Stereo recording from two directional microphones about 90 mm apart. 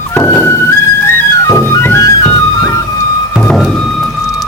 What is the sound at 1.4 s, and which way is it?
Flute, 40° left (ahead or behind).